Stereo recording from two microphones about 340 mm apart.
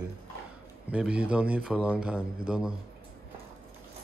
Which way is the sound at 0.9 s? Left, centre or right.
Centre.